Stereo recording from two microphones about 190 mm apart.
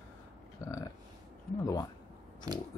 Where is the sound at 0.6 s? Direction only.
20° left (ahead or behind).